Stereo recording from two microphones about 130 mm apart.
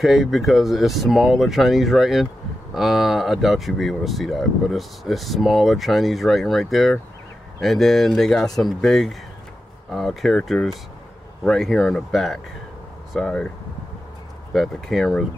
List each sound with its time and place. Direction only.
0.0 s speech: centre (ahead or behind)
14.5 s speech: centre (ahead or behind)